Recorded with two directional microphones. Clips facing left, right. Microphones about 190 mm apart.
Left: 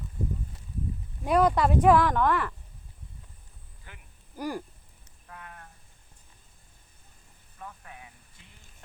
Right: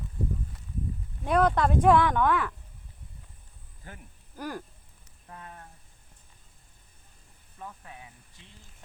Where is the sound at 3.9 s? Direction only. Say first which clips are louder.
Right 6 dB; 45° right (ahead or behind).